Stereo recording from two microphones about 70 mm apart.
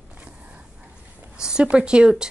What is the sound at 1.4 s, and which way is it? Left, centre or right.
Speech, centre.